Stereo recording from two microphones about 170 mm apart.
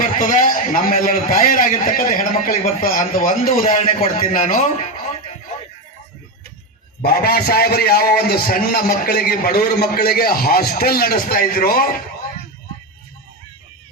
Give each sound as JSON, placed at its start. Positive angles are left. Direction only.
{"t": 0.0, "sound": "a man's voice", "side_deg": 50}
{"t": 3.8, "sound": "a man's voice", "side_deg": 35}
{"t": 4.3, "sound": "a man's voice", "side_deg": 55}
{"t": 7.0, "sound": "a man's voice", "side_deg": 65}